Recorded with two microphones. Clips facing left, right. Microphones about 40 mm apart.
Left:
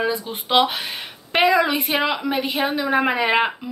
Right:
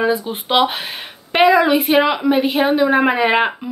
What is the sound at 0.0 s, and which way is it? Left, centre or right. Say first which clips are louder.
Speech: right 5 dB; centre.